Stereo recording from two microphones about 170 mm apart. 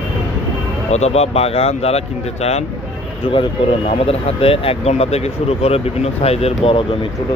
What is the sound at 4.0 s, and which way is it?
Speech, 35° left (ahead or behind).